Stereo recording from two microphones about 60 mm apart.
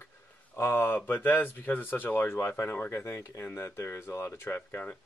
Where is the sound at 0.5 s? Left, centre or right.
Left.